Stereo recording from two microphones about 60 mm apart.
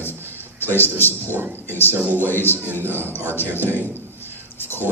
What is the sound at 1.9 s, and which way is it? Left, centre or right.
Speech, right.